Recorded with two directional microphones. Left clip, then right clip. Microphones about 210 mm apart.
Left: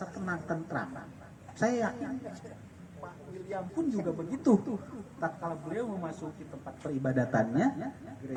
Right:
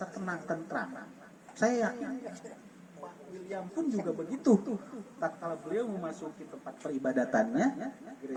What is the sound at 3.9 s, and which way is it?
A man's voice, 40° right (ahead or behind).